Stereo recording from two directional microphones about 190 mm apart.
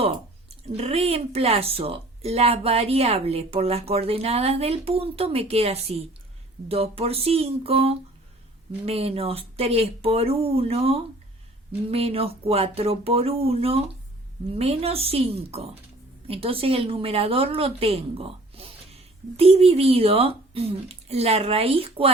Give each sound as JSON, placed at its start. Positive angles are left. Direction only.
{"t": 0.7, "sound": "a woman's voice", "side_deg": -30}